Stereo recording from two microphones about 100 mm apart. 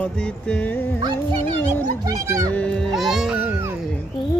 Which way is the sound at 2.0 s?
35° right (ahead or behind).